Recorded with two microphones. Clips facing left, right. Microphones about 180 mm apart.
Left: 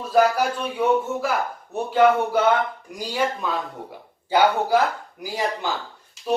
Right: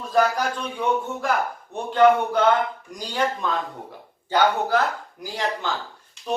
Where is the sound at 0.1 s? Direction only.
5° left (ahead or behind).